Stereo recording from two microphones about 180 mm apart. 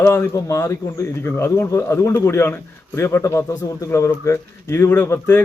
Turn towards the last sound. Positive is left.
turn(degrees=10)  # may be behind; listen again after turning